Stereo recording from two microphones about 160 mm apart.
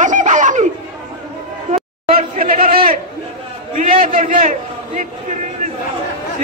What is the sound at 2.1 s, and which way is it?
Chatter, 60° right (ahead or behind).